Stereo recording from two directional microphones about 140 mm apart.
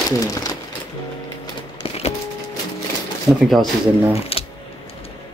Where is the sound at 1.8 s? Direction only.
45° left (ahead or behind).